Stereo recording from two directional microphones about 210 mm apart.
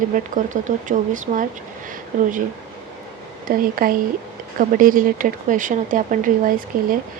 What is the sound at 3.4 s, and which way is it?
Speech, 45° right (ahead or behind).